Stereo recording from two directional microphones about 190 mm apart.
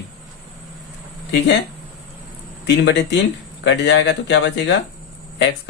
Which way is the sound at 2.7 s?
65° left (ahead or behind).